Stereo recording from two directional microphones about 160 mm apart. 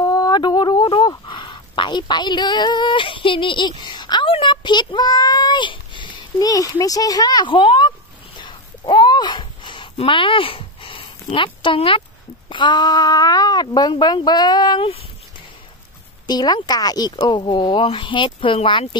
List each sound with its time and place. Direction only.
0.0 s speech: 25° left (ahead or behind)
8.4 s a sound: 30° left (ahead or behind)
12.4 s speech: 30° left (ahead or behind)
16.3 s speech: 25° left (ahead or behind)